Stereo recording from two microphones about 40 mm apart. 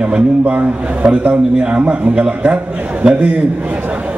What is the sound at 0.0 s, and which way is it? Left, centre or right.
A man's voice, right.